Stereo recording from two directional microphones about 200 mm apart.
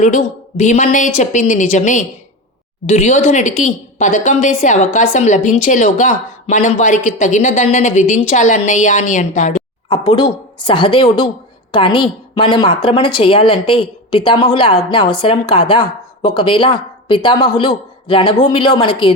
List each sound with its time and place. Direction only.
0.6 s speech: 35° left (ahead or behind)
9.9 s a woman's voice: 25° left (ahead or behind)